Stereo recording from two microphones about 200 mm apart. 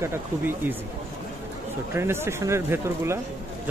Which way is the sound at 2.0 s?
10° right (ahead or behind).